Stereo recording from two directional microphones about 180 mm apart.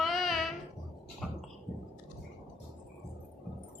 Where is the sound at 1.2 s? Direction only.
Centre (ahead or behind).